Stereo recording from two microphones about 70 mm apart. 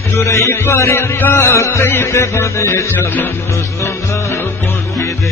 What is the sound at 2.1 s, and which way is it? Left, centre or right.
Music, left.